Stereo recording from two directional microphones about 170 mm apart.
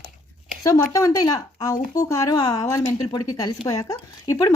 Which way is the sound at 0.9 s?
20° left (ahead or behind).